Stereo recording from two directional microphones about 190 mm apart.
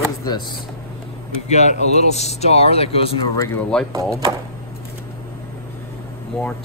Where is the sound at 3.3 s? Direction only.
10° left (ahead or behind).